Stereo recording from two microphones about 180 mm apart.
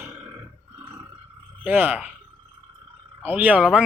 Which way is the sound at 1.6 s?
10° right (ahead or behind).